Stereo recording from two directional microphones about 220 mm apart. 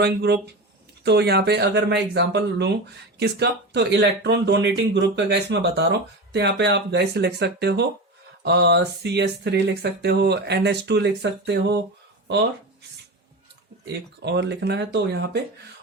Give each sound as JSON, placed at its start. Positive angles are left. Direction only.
{"t": 0.0, "sound": "speech", "side_deg": -50}
{"t": 13.8, "sound": "speech", "side_deg": -50}